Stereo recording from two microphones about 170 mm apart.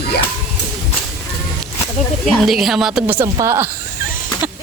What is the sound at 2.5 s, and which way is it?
Speech, centre (ahead or behind).